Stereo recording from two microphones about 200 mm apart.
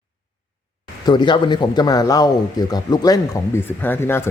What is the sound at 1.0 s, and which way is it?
Speech, 25° left (ahead or behind).